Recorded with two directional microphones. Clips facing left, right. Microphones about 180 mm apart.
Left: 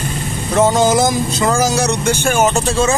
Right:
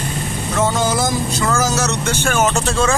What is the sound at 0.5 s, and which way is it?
Speech, 20° left (ahead or behind).